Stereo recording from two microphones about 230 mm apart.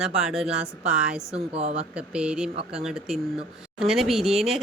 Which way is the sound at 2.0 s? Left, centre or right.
Centre.